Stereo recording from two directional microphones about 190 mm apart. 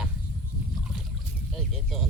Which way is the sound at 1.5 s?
Centre (ahead or behind).